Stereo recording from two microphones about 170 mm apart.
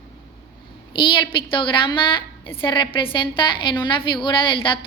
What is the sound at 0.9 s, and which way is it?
A woman's voice, 30° left (ahead or behind).